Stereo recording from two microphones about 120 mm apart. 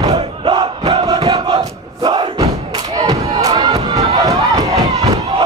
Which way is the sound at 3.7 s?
30° right (ahead or behind).